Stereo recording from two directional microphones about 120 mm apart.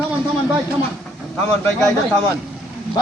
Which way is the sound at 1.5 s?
5° left (ahead or behind).